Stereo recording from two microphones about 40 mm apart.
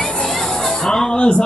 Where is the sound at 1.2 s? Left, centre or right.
Left.